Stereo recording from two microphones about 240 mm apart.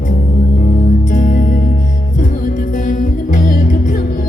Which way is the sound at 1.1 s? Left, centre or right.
Left.